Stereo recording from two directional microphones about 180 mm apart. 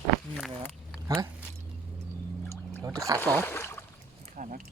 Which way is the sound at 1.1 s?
15° right (ahead or behind).